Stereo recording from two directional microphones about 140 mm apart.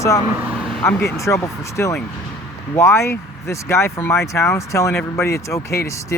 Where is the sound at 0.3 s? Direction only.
15° right (ahead or behind).